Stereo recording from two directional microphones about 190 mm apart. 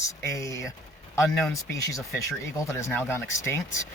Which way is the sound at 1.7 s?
15° left (ahead or behind).